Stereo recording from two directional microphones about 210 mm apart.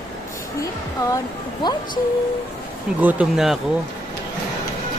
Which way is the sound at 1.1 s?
20° left (ahead or behind).